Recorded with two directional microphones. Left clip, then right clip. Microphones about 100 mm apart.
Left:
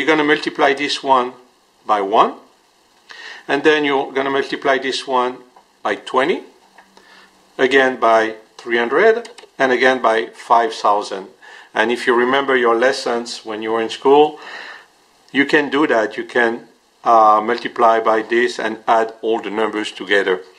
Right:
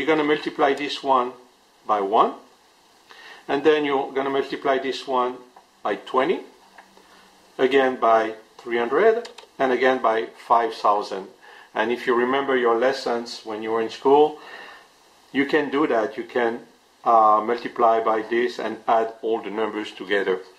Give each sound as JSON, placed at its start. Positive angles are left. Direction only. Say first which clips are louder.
{"t": 0.0, "sound": "speech", "louder": "left 6 dB", "side_deg": 40}
{"t": 7.5, "sound": "speech", "louder": "left 5 dB", "side_deg": 40}